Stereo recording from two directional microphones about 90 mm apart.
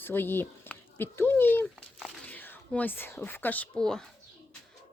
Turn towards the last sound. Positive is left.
turn(degrees=5)  # may be behind; listen again after turning